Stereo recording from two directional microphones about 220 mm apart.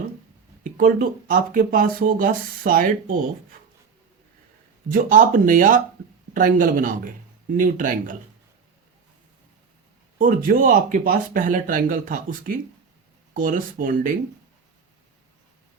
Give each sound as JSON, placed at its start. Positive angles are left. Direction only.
{"t": 0.6, "sound": "speech", "side_deg": -40}
{"t": 4.9, "sound": "speech", "side_deg": -40}
{"t": 10.2, "sound": "speech", "side_deg": -40}